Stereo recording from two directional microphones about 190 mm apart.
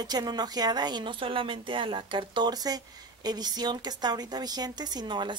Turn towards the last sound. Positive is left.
turn(degrees=-25)  # may be behind; listen again after turning